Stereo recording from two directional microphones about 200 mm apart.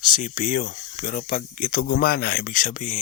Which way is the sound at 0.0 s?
40° left (ahead or behind).